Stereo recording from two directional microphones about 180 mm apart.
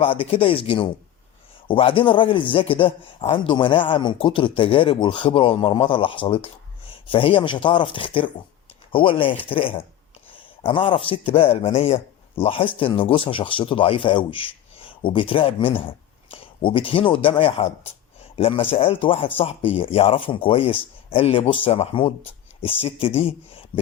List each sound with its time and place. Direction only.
0.0 s speech: 30° left (ahead or behind)